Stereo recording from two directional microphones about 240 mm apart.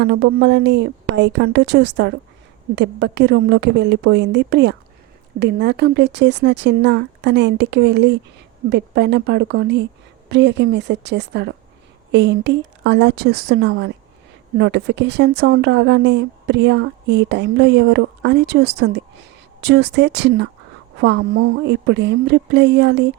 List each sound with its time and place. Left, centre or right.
0.0 s speech: right